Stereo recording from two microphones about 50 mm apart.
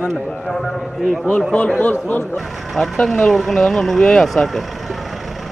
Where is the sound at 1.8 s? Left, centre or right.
Left.